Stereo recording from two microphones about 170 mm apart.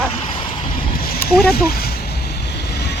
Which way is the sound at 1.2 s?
65° left (ahead or behind).